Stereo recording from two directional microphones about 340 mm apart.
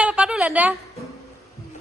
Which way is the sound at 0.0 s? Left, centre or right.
Centre.